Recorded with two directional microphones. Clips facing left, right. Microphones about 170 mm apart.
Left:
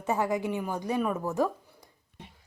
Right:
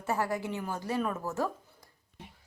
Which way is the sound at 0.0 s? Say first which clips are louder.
Left 4 dB; 20° left (ahead or behind).